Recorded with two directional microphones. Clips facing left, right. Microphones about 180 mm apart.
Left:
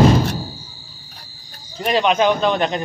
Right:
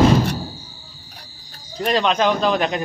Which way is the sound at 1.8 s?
5° left (ahead or behind).